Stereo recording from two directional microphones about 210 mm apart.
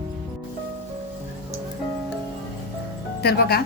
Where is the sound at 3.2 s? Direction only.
50° left (ahead or behind).